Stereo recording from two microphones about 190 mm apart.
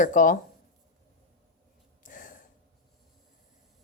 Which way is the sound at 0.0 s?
45° left (ahead or behind).